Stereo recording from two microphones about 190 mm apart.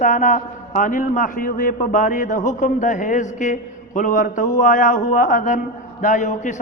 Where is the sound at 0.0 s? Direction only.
40° left (ahead or behind).